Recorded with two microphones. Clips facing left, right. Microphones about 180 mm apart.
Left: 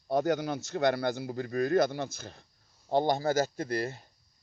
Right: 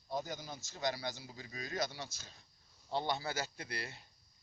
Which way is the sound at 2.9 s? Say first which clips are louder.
Left 11 dB; 50° left (ahead or behind).